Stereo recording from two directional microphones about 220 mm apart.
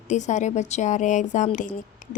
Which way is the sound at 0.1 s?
35° left (ahead or behind).